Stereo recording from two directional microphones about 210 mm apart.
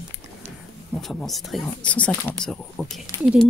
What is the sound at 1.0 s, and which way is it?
A woman's voice, centre (ahead or behind).